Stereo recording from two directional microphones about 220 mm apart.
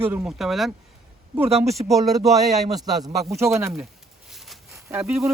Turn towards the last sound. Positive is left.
turn(degrees=0)  # may be behind; listen again after turning